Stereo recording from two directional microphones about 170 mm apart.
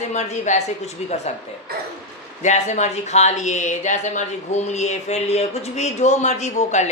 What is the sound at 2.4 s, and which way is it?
Speech, 45° left (ahead or behind).